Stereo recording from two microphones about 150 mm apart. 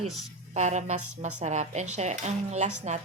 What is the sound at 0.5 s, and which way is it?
A woman's voice, 50° right (ahead or behind).